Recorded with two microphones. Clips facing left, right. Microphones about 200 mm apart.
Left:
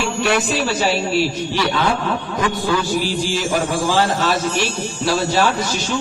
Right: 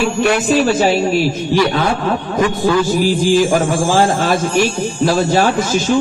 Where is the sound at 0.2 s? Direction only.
50° right (ahead or behind).